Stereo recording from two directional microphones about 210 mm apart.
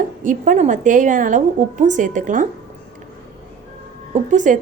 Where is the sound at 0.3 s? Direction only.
35° right (ahead or behind).